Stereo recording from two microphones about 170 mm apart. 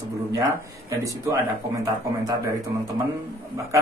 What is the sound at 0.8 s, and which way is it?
Speech, 20° right (ahead or behind).